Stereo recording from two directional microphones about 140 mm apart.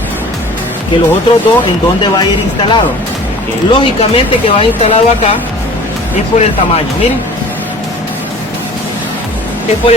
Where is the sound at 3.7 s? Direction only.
40° left (ahead or behind).